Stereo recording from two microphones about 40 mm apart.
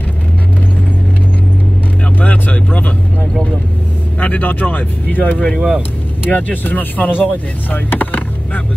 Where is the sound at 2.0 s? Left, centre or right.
Left.